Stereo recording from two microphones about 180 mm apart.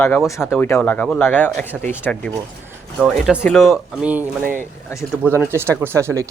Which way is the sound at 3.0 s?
5° right (ahead or behind).